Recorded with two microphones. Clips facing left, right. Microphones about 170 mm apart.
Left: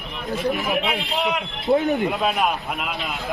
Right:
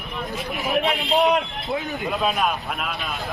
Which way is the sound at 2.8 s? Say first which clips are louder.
Left 1 dB; 20° left (ahead or behind).